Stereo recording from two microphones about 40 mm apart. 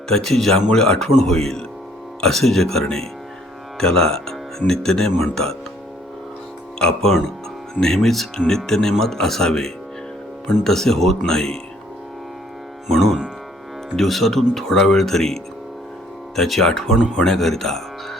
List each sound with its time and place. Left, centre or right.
0.1 s speech: centre
6.7 s speech: left
12.9 s speech: centre